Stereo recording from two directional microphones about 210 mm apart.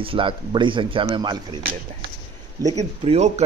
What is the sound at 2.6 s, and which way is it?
Speech, 30° right (ahead or behind).